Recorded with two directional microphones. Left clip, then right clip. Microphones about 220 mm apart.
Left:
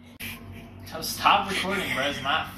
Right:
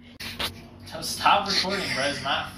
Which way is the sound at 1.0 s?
Centre (ahead or behind).